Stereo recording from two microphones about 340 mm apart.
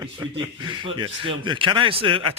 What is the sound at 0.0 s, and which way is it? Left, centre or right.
Speech, centre.